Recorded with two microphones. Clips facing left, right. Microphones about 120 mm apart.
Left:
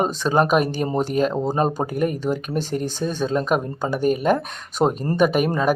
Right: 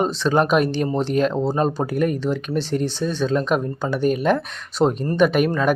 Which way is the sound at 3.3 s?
5° left (ahead or behind).